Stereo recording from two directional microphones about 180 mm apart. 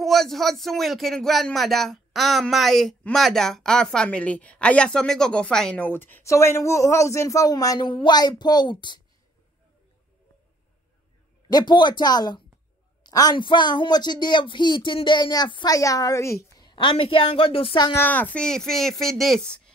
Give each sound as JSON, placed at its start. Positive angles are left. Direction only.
{"t": 0.0, "sound": "speech", "side_deg": 0}
{"t": 11.4, "sound": "speech", "side_deg": 25}
{"t": 18.0, "sound": "speech", "side_deg": 10}